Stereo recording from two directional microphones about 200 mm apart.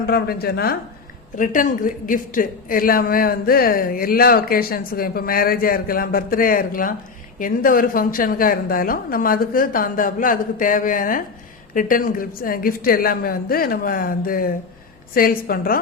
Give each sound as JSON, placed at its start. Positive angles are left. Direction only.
{"t": 0.0, "sound": "speech", "side_deg": 50}
{"t": 1.4, "sound": "speech", "side_deg": 40}